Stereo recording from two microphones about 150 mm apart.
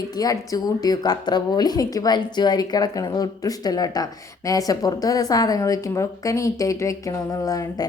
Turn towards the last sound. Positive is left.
turn(degrees=25)  # may be behind; listen again after turning